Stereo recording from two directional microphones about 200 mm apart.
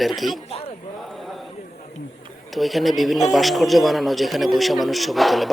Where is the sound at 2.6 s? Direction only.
Centre (ahead or behind).